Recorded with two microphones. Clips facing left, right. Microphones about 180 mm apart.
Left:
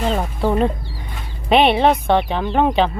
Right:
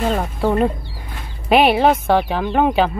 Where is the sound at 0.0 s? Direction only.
Centre (ahead or behind).